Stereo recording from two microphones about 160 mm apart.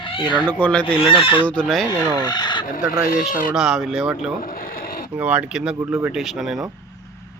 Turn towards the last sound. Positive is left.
turn(degrees=0)  # may be behind; listen again after turning